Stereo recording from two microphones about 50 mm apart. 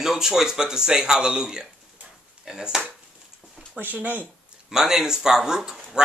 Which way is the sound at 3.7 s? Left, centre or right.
Right.